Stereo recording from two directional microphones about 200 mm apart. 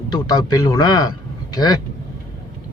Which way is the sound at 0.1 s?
20° left (ahead or behind).